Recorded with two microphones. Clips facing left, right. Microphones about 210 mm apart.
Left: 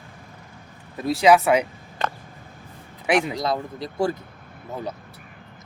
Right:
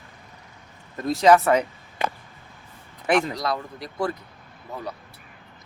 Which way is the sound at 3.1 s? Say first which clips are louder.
Even; 5° left (ahead or behind).